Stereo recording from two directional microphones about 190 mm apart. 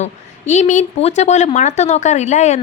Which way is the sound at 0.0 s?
40° left (ahead or behind).